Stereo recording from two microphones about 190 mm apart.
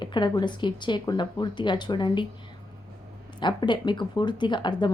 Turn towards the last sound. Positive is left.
turn(degrees=25)  # may be behind; listen again after turning